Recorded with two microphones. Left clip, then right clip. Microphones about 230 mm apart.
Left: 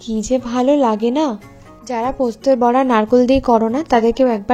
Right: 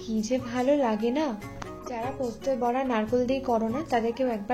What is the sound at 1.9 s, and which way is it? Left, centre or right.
A woman's voice, left.